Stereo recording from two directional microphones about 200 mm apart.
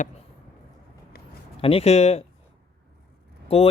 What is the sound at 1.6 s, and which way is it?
Speech, 30° left (ahead or behind).